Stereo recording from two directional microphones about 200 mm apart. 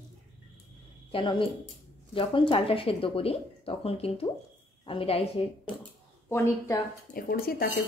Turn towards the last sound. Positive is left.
turn(degrees=50)  # may be behind; listen again after turning